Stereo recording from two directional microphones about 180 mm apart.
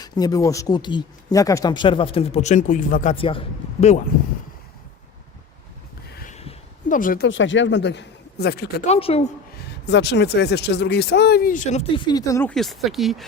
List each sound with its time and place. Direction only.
0.0 s speech: 20° left (ahead or behind); by 3.2 s 45° left (ahead or behind)
3.2 s a man's voice: 30° left (ahead or behind)
6.3 s a sound: 40° left (ahead or behind)
7.3 s speech: 90° left; by 8.8 s 65° left (ahead or behind)
8.9 s a man's voice: 35° left (ahead or behind)
9.8 s speech: 70° left (ahead or behind); by 11.9 s 40° left (ahead or behind)
11.9 s speech: 25° left (ahead or behind)
12.5 s speech: centre (ahead or behind)